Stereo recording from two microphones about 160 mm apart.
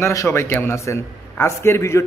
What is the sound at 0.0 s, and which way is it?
A man's voice, 20° left (ahead or behind).